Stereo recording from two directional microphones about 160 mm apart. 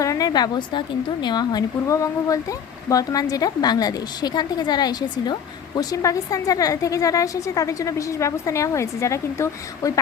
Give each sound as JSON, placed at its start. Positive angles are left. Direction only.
{"t": 0.0, "sound": "speech", "side_deg": 20}